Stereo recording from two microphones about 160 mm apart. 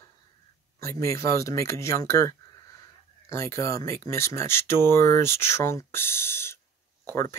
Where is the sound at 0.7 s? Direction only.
20° left (ahead or behind).